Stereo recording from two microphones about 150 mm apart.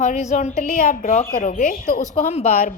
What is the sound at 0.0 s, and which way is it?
A woman's voice, 55° left (ahead or behind).